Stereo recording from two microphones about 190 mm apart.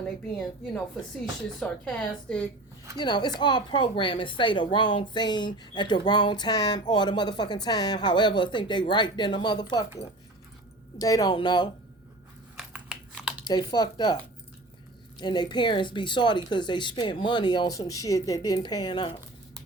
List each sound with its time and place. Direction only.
1.5 s a woman's voice: 5° left (ahead or behind)
3.0 s a woman's voice: 25° left (ahead or behind)
10.9 s a woman's voice: 20° left (ahead or behind)
12.5 s typing: 5° right (ahead or behind)
13.5 s a woman's voice: 20° left (ahead or behind)
15.2 s a woman's voice: 25° left (ahead or behind)